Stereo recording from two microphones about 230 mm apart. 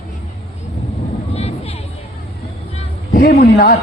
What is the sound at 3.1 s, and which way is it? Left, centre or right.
Speech, left.